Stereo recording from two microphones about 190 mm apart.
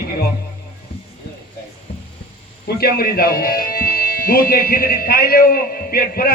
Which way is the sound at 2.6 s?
55° left (ahead or behind).